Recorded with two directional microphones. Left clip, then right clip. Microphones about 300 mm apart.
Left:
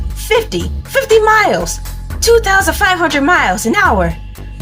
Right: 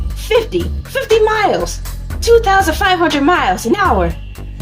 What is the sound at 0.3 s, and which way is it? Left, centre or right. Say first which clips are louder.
Speech: even; left.